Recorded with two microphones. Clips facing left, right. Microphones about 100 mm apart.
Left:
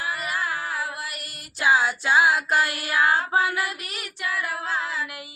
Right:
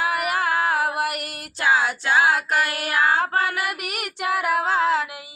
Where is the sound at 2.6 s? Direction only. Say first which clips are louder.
Right 1 dB; 65° right (ahead or behind).